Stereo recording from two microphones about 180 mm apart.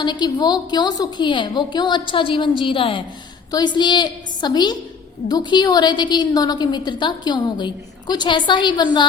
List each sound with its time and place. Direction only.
0.0 s a woman's voice: 25° left (ahead or behind)